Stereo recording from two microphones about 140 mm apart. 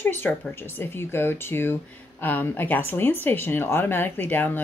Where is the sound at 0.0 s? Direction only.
15° left (ahead or behind).